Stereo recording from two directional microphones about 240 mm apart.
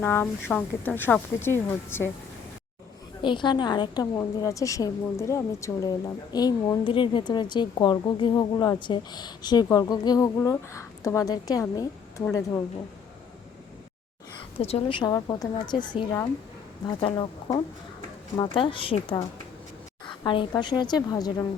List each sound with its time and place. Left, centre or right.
0.0 s a woman's voice: centre
3.2 s a woman's voice: centre
14.6 s a woman's voice: left
16.8 s a woman's voice: centre